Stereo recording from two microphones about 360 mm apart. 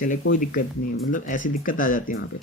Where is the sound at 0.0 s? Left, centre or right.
Left.